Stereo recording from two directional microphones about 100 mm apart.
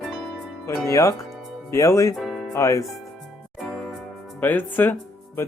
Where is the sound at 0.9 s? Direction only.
30° left (ahead or behind).